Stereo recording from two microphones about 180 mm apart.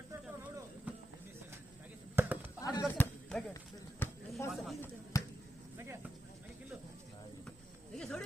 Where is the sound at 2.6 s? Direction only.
20° left (ahead or behind).